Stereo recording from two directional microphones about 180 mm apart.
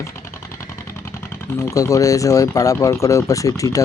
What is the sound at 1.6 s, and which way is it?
Speech, 20° left (ahead or behind).